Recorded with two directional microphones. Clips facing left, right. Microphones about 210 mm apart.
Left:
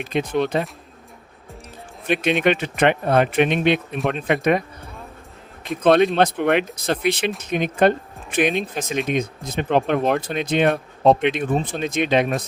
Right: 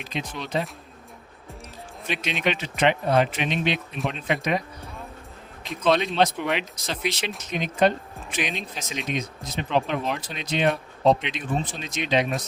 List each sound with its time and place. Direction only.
0.0 s speech: 55° left (ahead or behind)
2.0 s speech: 55° left (ahead or behind)
5.6 s speech: 55° left (ahead or behind)